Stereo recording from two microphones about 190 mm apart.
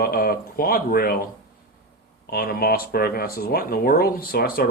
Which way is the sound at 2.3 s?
50° left (ahead or behind).